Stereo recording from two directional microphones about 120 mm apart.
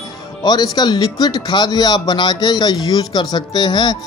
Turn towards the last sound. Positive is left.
turn(degrees=40)  # may be behind; listen again after turning